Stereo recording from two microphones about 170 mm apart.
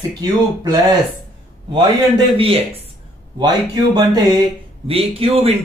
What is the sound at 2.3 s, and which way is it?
Speech, 35° right (ahead or behind).